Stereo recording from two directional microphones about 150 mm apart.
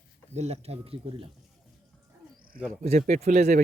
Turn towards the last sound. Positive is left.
turn(degrees=-50)  # may be behind; listen again after turning